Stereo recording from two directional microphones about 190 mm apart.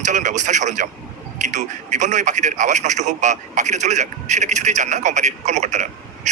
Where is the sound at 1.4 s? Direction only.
40° right (ahead or behind).